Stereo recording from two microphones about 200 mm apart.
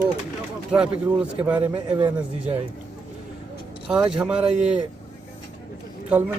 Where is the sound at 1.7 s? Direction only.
25° right (ahead or behind).